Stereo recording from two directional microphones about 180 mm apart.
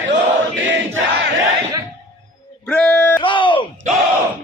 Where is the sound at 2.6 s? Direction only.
5° left (ahead or behind).